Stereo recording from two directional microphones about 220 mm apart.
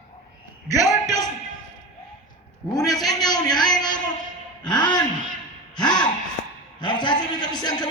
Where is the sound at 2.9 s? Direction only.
15° left (ahead or behind).